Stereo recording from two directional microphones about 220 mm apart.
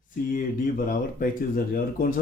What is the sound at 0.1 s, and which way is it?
Speech, 40° left (ahead or behind).